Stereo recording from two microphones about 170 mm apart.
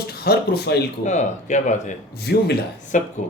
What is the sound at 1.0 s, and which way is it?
Speech, 45° left (ahead or behind).